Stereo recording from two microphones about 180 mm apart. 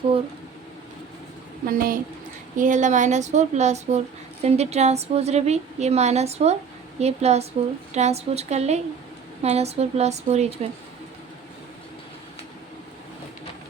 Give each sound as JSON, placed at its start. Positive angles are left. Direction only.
{"t": 1.6, "sound": "a woman's voice", "side_deg": -55}